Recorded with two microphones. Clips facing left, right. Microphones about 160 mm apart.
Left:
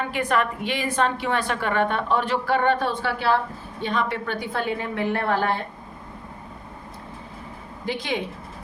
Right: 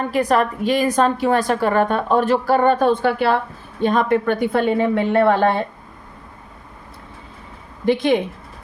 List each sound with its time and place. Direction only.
0.1 s a woman's voice: 35° right (ahead or behind); by 5.5 s 65° right (ahead or behind)
7.9 s a woman's voice: 55° right (ahead or behind)